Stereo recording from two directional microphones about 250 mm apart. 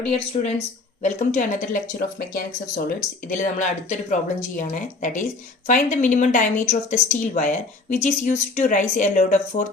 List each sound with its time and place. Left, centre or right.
0.3 s speech: left